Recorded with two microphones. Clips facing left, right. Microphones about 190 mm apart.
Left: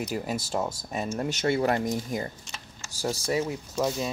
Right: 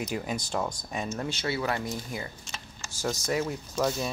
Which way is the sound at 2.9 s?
30° left (ahead or behind).